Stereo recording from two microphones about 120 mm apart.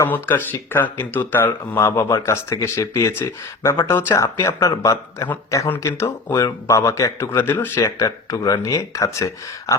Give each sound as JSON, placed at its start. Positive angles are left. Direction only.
{"t": 0.0, "sound": "speech", "side_deg": 15}